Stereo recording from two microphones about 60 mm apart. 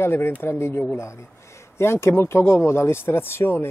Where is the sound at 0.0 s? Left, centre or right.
Left.